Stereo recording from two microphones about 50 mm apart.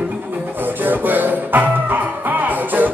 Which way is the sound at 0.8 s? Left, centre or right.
Right.